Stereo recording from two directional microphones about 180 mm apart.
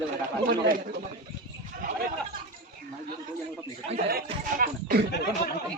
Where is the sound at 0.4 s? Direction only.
55° right (ahead or behind).